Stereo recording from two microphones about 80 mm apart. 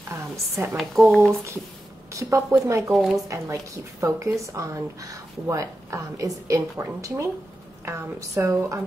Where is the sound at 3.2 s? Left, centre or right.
Right.